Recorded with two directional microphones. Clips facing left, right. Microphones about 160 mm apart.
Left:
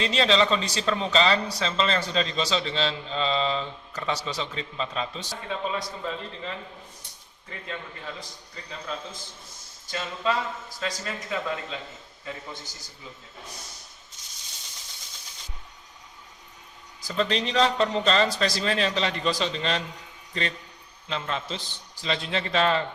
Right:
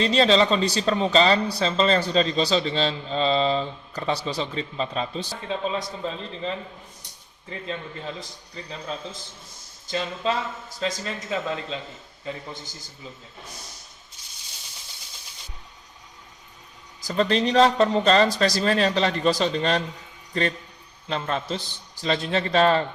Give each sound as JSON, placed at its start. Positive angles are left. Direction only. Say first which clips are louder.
{"t": 0.0, "sound": "speech", "louder": "right 4 dB", "side_deg": -35}
{"t": 7.5, "sound": "speech", "louder": "right 5 dB", "side_deg": -25}
{"t": 9.8, "sound": "speech", "louder": "right 2 dB", "side_deg": -25}
{"t": 17.0, "sound": "speech", "louder": "right 4 dB", "side_deg": -40}